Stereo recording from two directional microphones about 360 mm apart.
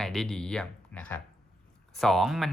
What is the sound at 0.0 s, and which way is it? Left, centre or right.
Speech, centre.